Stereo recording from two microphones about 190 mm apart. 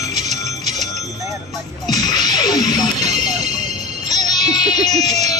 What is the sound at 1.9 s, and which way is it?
Music, 20° left (ahead or behind).